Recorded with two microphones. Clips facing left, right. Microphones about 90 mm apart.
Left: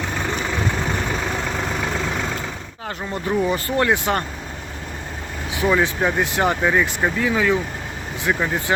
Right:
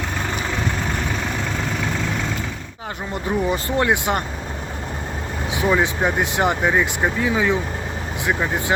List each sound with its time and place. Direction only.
3.1 s speech: 20° right (ahead or behind)
5.5 s speech: 15° right (ahead or behind)